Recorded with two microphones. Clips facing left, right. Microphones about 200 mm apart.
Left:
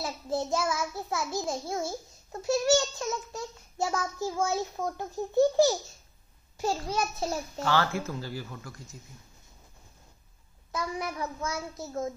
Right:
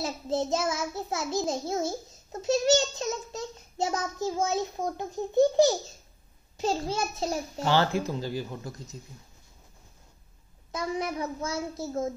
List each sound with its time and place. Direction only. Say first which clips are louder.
0.0 s a child's voice: right 2 dB; 20° right (ahead or behind)
10.7 s a child's voice: right 3 dB; 20° right (ahead or behind)